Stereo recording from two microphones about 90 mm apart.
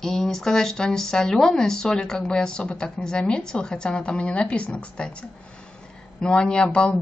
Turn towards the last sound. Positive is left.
turn(degrees=10)  # may be behind; listen again after turning